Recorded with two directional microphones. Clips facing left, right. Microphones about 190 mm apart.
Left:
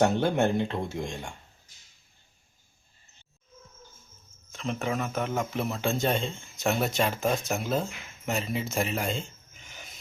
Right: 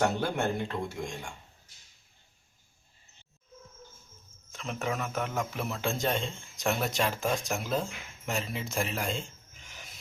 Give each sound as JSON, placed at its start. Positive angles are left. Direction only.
{"t": 0.0, "sound": "speech", "side_deg": 20}
{"t": 4.5, "sound": "speech", "side_deg": 0}